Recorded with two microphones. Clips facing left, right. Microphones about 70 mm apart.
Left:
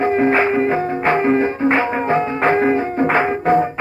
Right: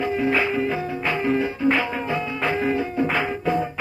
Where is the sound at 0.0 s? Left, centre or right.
Left.